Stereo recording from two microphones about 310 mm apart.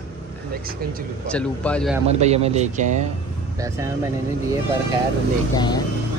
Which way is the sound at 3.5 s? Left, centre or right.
Centre.